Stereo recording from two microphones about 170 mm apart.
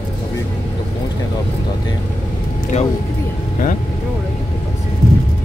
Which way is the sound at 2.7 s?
40° left (ahead or behind).